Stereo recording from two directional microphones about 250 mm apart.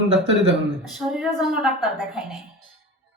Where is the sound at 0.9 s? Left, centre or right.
Centre.